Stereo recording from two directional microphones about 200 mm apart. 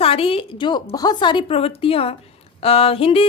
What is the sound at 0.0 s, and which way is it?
A woman's voice, 30° left (ahead or behind).